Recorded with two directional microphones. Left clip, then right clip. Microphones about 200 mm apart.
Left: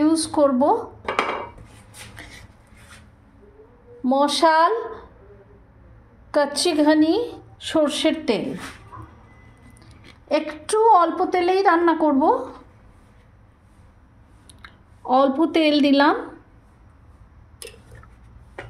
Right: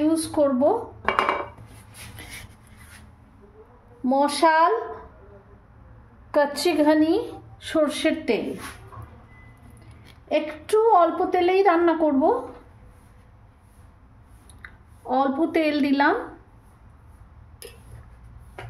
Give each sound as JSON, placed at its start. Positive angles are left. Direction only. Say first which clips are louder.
{"t": 0.1, "sound": "a woman's voice", "louder": "left 3 dB", "side_deg": 15}
{"t": 4.0, "sound": "a woman's voice", "louder": "left 2 dB", "side_deg": 5}
{"t": 6.3, "sound": "a woman's voice", "louder": "left 1 dB", "side_deg": 10}
{"t": 10.2, "sound": "a woman's voice", "louder": "left 2 dB", "side_deg": 15}
{"t": 14.6, "sound": "speech", "louder": "left 3 dB", "side_deg": 15}